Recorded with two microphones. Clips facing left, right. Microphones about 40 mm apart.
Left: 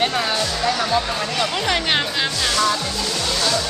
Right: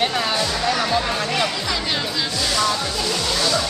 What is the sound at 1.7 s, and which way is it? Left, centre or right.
Speech, left.